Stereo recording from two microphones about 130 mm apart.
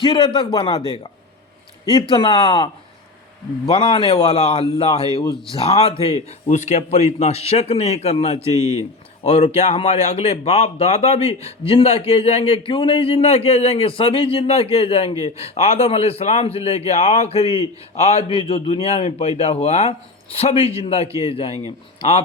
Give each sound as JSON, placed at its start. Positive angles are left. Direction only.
{"t": 0.0, "sound": "a man's voice", "side_deg": 35}
{"t": 3.7, "sound": "a man's voice", "side_deg": 40}
{"t": 6.5, "sound": "a man's voice", "side_deg": 60}
{"t": 8.5, "sound": "speech", "side_deg": -25}
{"t": 9.2, "sound": "a man's voice", "side_deg": 50}